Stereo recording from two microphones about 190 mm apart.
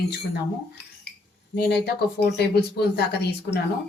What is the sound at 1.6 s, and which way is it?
A woman's voice, 60° left (ahead or behind).